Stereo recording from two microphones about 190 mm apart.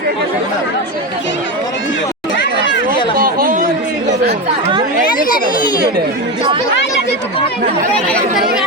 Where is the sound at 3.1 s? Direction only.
50° right (ahead or behind).